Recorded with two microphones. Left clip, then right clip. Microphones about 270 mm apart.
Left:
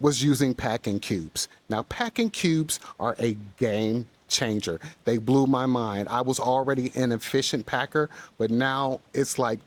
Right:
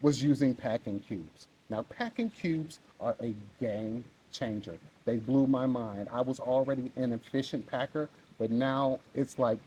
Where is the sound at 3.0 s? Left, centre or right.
Left.